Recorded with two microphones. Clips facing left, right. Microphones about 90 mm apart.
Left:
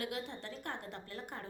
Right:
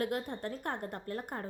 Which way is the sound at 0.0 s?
50° right (ahead or behind).